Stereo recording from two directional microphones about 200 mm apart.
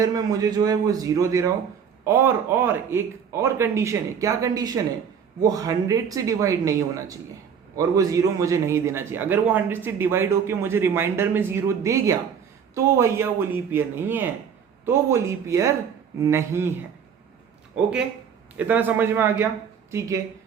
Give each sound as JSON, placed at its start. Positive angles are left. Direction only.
{"t": 0.0, "sound": "a man's voice", "side_deg": -20}
{"t": 18.5, "sound": "a man's voice", "side_deg": -10}